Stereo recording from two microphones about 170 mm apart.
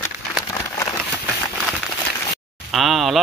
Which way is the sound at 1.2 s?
5° right (ahead or behind).